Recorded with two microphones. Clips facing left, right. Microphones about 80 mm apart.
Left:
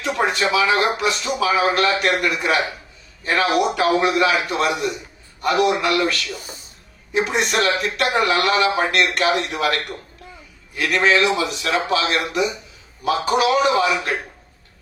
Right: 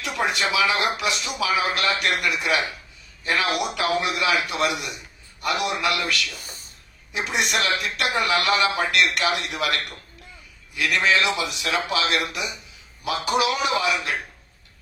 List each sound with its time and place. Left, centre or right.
0.0 s a man's voice: left